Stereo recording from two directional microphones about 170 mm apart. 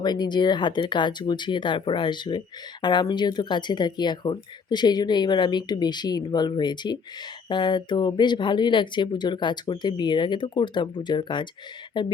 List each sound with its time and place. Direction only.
0.0 s speech: 25° left (ahead or behind)